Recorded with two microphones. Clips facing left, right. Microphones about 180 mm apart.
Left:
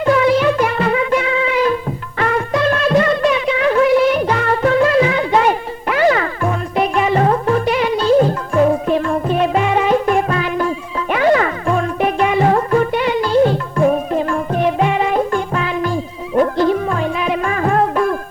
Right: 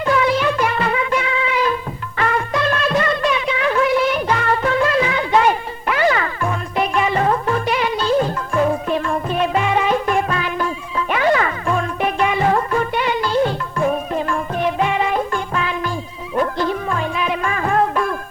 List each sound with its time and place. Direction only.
0.0 s music: 45° left (ahead or behind)